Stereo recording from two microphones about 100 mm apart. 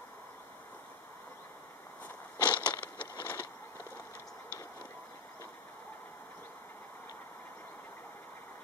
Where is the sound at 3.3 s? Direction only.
20° left (ahead or behind).